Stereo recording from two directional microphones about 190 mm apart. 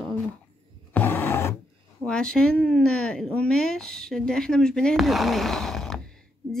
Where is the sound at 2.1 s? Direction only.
5° left (ahead or behind).